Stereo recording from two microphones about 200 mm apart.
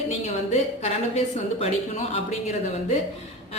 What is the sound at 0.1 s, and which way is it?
A woman's voice, 35° left (ahead or behind).